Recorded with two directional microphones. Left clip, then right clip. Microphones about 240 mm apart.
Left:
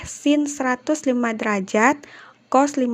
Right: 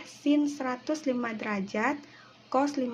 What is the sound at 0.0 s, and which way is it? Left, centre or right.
Speech, left.